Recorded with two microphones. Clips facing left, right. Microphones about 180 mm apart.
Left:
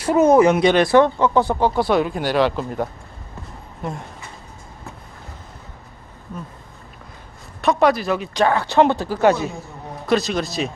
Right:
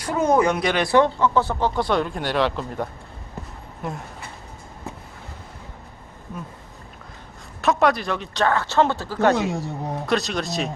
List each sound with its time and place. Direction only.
0.0 s speech: 25° left (ahead or behind); by 2.8 s 5° left (ahead or behind)
3.8 s a man's voice: centre (ahead or behind)
7.6 s speech: centre (ahead or behind)
9.3 s speech: 80° right
10.1 s a man's voice: centre (ahead or behind)